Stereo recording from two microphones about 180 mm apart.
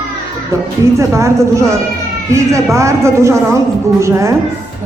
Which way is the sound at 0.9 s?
15° right (ahead or behind).